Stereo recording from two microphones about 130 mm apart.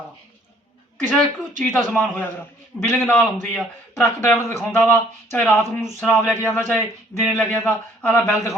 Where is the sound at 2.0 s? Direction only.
15° left (ahead or behind).